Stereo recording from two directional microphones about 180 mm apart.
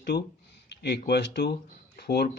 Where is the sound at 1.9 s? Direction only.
65° left (ahead or behind).